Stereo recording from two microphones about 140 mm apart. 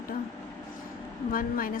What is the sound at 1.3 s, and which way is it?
Speech, 90° left.